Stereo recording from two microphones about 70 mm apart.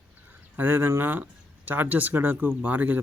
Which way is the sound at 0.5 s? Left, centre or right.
Right.